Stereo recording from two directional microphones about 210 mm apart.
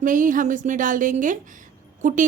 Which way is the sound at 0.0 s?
40° right (ahead or behind).